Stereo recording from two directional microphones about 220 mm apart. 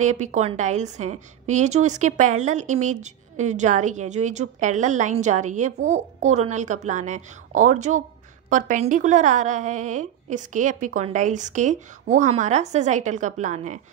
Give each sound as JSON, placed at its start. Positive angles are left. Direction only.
{"t": 0.0, "sound": "a woman's voice", "side_deg": -35}